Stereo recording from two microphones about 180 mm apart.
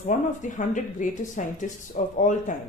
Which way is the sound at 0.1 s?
40° left (ahead or behind).